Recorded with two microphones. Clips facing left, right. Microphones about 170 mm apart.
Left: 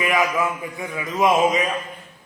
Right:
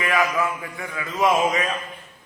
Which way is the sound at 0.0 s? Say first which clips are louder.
Left 1 dB; 15° left (ahead or behind).